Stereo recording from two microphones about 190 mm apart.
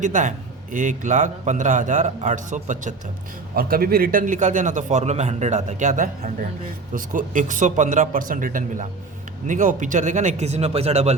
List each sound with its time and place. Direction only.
0.0 s a man's voice: 40° right (ahead or behind)